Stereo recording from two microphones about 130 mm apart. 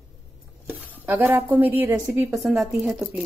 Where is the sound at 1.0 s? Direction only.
15° right (ahead or behind).